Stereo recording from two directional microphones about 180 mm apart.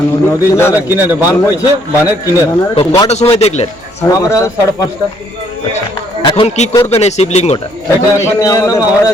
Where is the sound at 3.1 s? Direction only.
35° left (ahead or behind).